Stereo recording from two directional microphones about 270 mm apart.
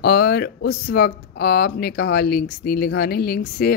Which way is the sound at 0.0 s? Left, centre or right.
Left.